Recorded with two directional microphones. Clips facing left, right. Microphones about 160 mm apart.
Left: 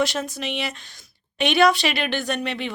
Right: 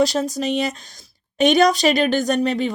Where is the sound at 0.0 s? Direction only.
35° right (ahead or behind).